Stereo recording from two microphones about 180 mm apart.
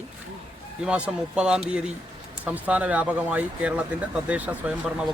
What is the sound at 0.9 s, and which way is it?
A man's voice, 5° right (ahead or behind).